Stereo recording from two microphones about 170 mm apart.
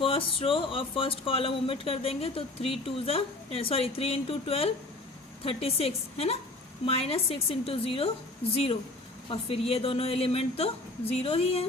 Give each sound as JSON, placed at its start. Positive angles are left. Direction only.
{"t": 0.0, "sound": "speech", "side_deg": 30}